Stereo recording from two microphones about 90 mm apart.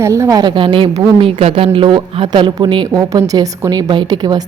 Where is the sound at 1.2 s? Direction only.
90° right; by 2.9 s 60° right (ahead or behind).